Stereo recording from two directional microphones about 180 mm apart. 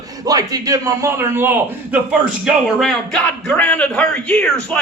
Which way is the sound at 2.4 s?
Centre (ahead or behind).